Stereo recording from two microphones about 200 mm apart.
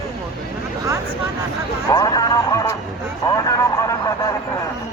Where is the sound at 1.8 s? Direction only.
20° left (ahead or behind).